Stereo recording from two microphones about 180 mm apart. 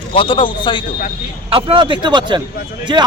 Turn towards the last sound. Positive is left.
turn(degrees=-25)  # may be behind; listen again after turning